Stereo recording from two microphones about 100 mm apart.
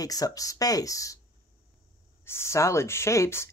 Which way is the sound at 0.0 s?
35° left (ahead or behind).